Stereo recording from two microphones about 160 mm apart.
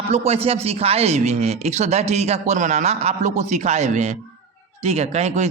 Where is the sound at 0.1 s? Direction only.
40° right (ahead or behind).